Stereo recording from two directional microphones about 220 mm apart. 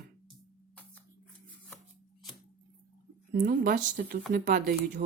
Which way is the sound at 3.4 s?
40° right (ahead or behind).